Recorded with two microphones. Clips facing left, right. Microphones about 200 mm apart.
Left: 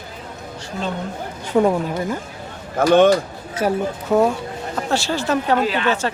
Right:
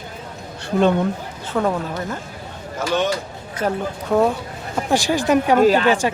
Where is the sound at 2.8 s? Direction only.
55° left (ahead or behind).